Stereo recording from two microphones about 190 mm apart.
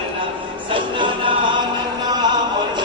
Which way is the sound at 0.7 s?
25° right (ahead or behind).